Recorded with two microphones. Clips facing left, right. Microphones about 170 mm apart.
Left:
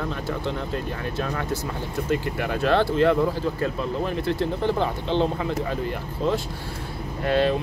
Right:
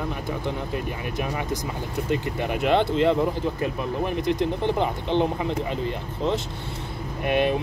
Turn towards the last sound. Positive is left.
turn(degrees=-20)  # may be behind; listen again after turning